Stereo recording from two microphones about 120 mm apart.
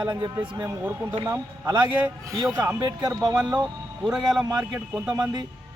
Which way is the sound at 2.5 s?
15° right (ahead or behind).